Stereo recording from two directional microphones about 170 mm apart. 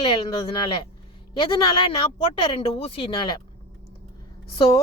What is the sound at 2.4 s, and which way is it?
Speech, 35° left (ahead or behind).